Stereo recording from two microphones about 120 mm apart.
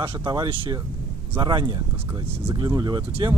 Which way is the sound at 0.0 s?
45° right (ahead or behind).